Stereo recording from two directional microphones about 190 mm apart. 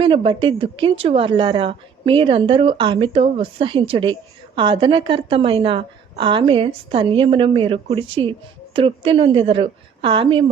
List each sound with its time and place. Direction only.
0.0 s a woman's voice: 25° right (ahead or behind)